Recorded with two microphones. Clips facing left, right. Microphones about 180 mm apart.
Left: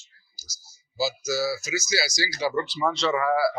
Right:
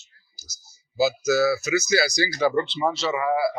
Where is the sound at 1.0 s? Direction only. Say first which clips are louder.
Right 6 dB; 60° right (ahead or behind).